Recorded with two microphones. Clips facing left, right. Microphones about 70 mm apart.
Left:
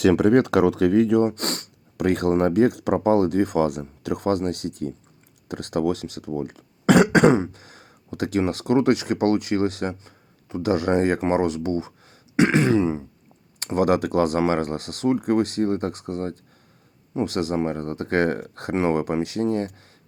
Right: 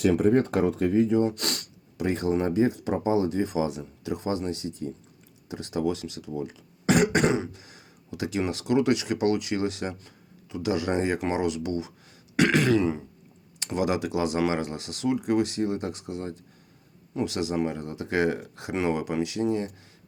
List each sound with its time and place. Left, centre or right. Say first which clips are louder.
0.0 s speech: left 4 dB; left
1.3 s speech: left 4 dB; left
2.0 s speech: left 5 dB; left
7.3 s speech: left 8 dB; left
12.4 s throat clearing: left 3 dB; left
13.7 s speech: left 6 dB; left